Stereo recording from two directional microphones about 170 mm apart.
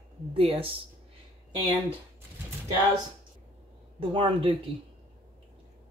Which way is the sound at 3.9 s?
30° right (ahead or behind).